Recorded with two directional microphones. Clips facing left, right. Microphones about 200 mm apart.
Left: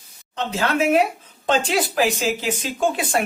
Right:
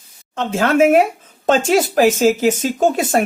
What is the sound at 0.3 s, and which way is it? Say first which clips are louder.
Speech: right 7 dB; 45° right (ahead or behind).